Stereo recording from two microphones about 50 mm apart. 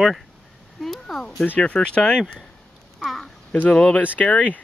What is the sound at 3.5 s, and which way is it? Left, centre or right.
Speech, centre.